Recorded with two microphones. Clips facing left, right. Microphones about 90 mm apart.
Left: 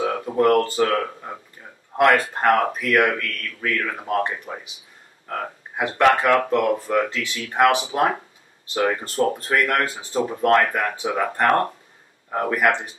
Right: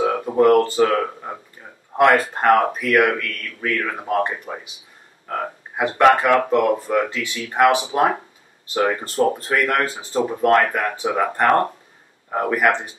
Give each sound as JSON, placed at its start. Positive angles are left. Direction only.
{"t": 0.0, "sound": "speech", "side_deg": -15}